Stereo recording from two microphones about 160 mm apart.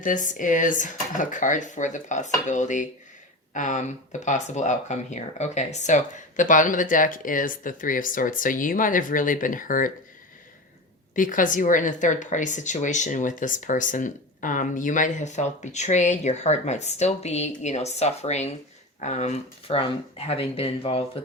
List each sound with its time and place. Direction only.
0.0 s speech: 55° left (ahead or behind)
11.1 s speech: 55° left (ahead or behind); by 21.0 s 40° left (ahead or behind)